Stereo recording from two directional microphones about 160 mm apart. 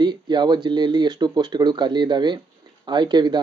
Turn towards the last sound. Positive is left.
turn(degrees=-25)  # may be behind; listen again after turning